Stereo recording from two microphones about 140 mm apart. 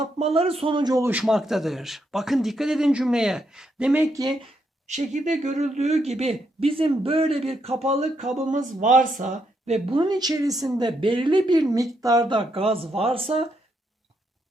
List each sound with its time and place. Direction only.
0.0 s speech: 50° right (ahead or behind); by 1.0 s 30° right (ahead or behind)
1.2 s speech: centre (ahead or behind)
4.1 s speech: 25° right (ahead or behind)
4.9 s speech: 55° right (ahead or behind)
8.4 s speech: 65° right (ahead or behind)
10.0 s speech: 30° right (ahead or behind)